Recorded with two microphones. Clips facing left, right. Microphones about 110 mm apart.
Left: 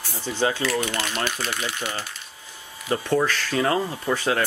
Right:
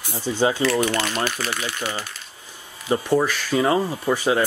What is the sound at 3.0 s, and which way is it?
Speech, 15° right (ahead or behind).